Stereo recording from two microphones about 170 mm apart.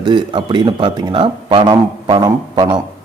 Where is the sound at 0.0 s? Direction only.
25° right (ahead or behind).